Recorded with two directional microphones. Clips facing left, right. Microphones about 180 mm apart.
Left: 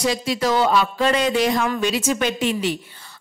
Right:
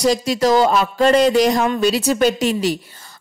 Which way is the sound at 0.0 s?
40° right (ahead or behind).